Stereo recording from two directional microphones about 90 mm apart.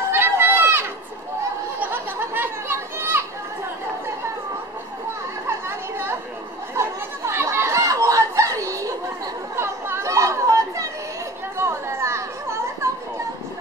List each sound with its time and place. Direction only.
0.1 s a sound: 25° right (ahead or behind)
3.1 s children playing: 25° right (ahead or behind)
5.5 s chatter: 30° right (ahead or behind)
9.6 s chatter: 25° right (ahead or behind)